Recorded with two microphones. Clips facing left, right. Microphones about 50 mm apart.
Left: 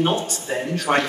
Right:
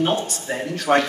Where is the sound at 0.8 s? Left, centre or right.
Left.